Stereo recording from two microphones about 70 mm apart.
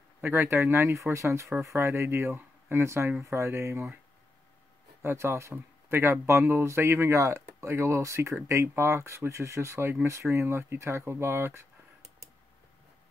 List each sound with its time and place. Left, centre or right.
0.2 s speech: right
5.0 s speech: right